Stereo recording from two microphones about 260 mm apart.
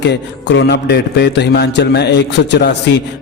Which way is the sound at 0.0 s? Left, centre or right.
Left.